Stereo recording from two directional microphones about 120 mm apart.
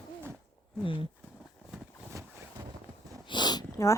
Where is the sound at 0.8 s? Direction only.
45° left (ahead or behind).